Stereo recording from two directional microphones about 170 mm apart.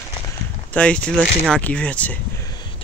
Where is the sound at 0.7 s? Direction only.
5° left (ahead or behind).